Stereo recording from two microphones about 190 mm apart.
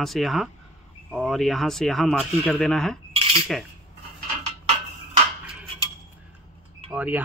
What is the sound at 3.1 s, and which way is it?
Cutlery, 30° right (ahead or behind).